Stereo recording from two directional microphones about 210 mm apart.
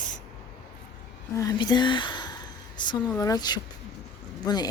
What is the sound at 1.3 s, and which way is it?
Speech, 15° left (ahead or behind).